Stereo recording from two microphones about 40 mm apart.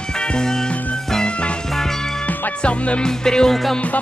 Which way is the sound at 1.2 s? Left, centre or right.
Left.